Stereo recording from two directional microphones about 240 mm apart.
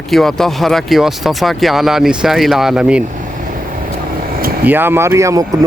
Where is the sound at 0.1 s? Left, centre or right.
Centre.